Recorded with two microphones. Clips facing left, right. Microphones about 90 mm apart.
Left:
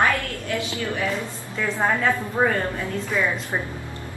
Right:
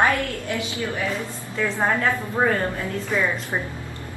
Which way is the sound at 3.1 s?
Centre (ahead or behind).